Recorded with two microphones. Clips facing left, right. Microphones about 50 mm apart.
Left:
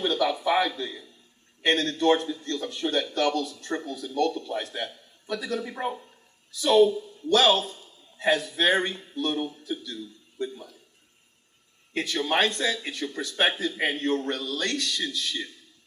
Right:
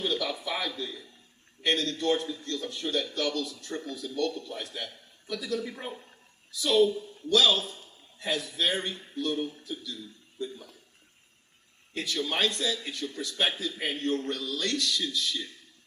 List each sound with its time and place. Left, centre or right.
0.0 s a sound: left
1.6 s a man's voice: left
10.3 s a man's voice: left
11.9 s a man's voice: left